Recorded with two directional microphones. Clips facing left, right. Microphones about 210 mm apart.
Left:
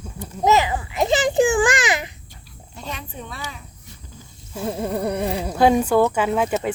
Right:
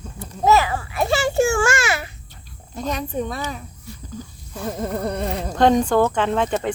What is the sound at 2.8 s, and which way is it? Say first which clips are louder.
Speech: right 9 dB; 40° right (ahead or behind).